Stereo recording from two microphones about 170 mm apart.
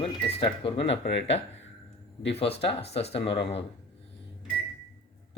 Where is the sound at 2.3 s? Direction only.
35° left (ahead or behind).